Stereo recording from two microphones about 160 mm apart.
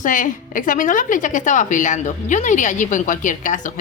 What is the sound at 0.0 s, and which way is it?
A woman's voice, 55° left (ahead or behind).